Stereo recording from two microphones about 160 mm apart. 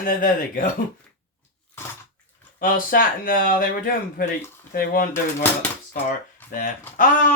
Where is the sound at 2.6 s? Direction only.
60° left (ahead or behind).